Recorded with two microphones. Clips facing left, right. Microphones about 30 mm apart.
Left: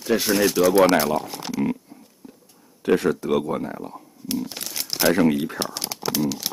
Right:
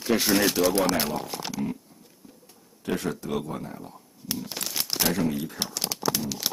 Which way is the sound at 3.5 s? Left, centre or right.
Left.